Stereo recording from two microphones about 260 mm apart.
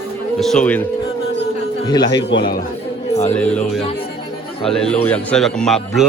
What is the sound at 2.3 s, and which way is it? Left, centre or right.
Speech, left.